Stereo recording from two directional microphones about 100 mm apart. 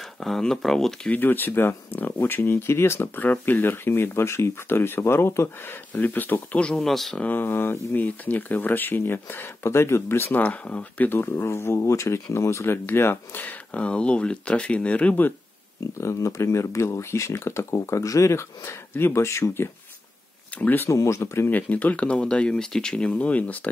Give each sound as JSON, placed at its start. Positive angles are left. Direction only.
{"t": 0.2, "sound": "speech", "side_deg": 5}
{"t": 1.1, "sound": "speech", "side_deg": 20}
{"t": 7.2, "sound": "speech", "side_deg": 20}
{"t": 16.0, "sound": "speech", "side_deg": 30}